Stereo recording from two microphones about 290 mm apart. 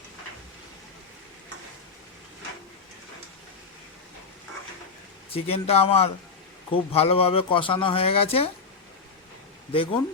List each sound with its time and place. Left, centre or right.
5.5 s a man's voice: centre
9.7 s speech: centre